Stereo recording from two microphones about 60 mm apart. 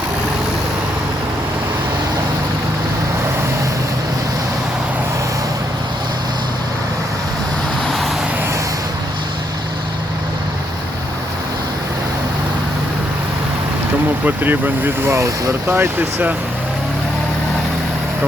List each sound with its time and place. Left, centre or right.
7.9 s vehicle: centre
14.3 s speech: right